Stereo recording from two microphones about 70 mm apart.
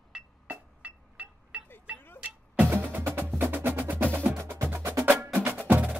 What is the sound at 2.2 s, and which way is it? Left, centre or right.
Music, right.